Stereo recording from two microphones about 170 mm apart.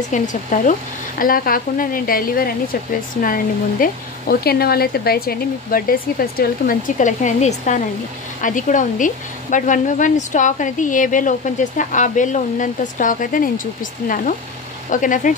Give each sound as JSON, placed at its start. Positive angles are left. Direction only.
{"t": 0.1, "sound": "a woman's voice", "side_deg": 50}